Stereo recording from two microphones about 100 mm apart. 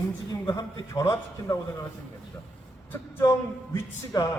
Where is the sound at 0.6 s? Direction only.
35° left (ahead or behind).